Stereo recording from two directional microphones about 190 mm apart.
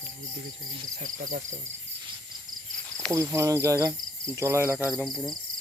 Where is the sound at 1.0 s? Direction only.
45° right (ahead or behind).